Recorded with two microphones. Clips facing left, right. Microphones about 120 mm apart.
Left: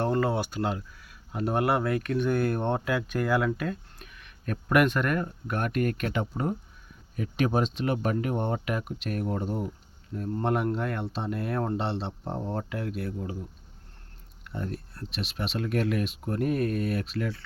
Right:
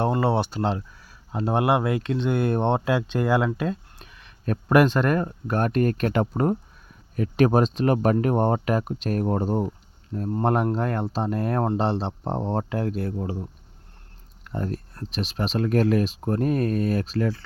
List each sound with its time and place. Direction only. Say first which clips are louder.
0.0 s speech: right 4 dB; 20° right (ahead or behind)
14.4 s speech: right 5 dB; 45° right (ahead or behind)